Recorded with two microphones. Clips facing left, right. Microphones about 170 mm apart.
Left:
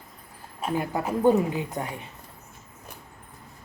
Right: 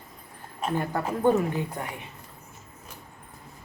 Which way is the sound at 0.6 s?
10° left (ahead or behind).